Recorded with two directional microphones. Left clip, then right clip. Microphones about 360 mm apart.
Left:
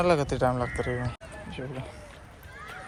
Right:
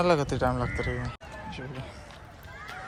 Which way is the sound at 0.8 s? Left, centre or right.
Centre.